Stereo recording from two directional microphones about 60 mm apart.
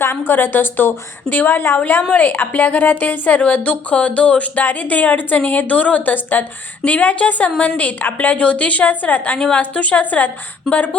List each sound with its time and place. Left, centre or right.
0.3 s a woman's voice: left